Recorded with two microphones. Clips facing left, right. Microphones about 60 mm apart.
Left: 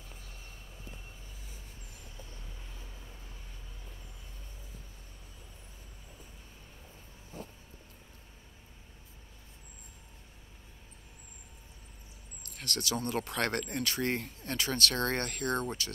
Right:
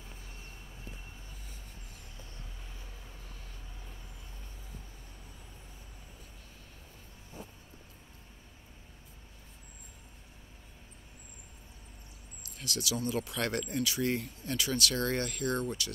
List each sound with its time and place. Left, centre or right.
12.4 s speech: left